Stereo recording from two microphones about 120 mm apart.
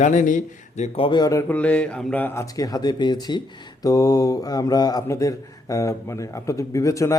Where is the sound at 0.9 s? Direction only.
40° left (ahead or behind).